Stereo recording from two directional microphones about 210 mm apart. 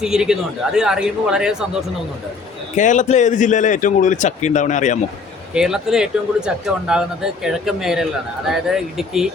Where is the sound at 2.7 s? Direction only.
35° left (ahead or behind).